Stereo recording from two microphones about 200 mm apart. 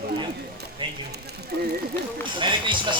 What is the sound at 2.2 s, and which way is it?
Speech, 25° right (ahead or behind).